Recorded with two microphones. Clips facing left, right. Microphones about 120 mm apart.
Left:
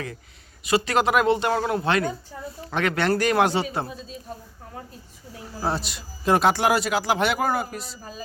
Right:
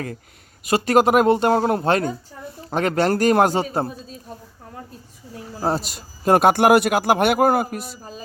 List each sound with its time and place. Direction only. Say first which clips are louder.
0.6 s a man's voice: right 5 dB; 45° right (ahead or behind)
5.6 s speech: right 4 dB; 40° right (ahead or behind)